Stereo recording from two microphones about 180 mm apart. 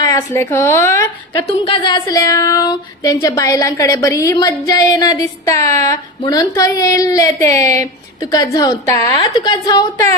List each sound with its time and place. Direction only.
0.0 s a woman's voice: 20° left (ahead or behind)
1.4 s female singing: 30° left (ahead or behind)